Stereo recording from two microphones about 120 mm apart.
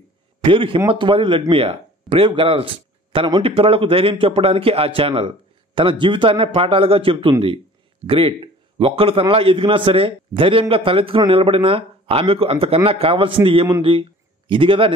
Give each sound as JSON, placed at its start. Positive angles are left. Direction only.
{"t": 0.4, "sound": "a man's voice", "side_deg": -45}